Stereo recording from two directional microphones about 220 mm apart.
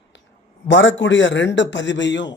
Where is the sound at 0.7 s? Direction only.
55° left (ahead or behind).